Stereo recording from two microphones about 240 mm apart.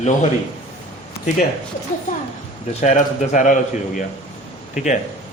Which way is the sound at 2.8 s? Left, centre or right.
Left.